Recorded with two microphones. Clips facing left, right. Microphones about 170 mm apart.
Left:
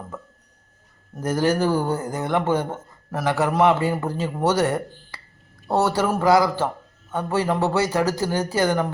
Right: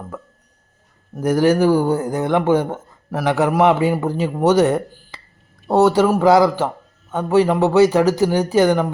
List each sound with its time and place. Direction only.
1.1 s speech: 15° right (ahead or behind)